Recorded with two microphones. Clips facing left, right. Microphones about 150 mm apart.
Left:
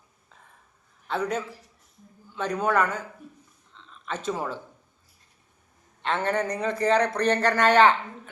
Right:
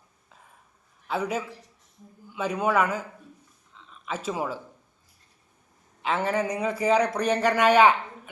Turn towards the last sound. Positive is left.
turn(degrees=-10)  # may be behind; listen again after turning